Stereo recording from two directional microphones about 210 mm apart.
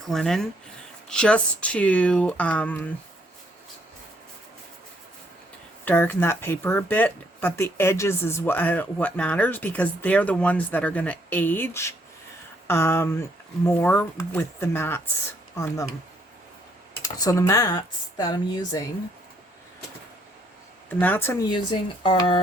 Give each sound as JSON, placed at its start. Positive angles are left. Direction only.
{"t": 0.1, "sound": "speech", "side_deg": 0}
{"t": 5.8, "sound": "speech", "side_deg": 10}
{"t": 17.0, "sound": "speech", "side_deg": 15}
{"t": 21.0, "sound": "speech", "side_deg": 10}
{"t": 21.5, "sound": "speech", "side_deg": 25}